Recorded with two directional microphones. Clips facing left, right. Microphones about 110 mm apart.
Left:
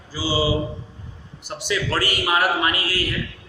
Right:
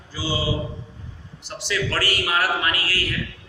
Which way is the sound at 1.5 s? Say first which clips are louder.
Left 2 dB; 15° left (ahead or behind).